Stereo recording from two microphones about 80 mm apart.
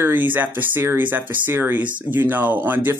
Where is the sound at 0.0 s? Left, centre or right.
Right.